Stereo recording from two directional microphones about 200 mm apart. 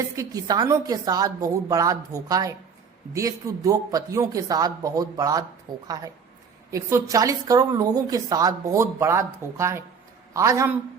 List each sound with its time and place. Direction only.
0.2 s a woman's voice: 20° right (ahead or behind)